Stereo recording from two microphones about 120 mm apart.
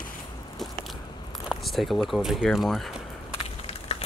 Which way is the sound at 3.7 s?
60° left (ahead or behind).